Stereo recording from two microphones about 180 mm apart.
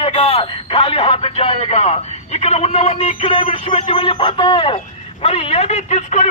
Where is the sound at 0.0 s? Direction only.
35° left (ahead or behind).